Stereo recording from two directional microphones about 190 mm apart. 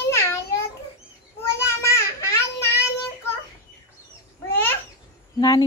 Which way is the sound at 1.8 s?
15° left (ahead or behind).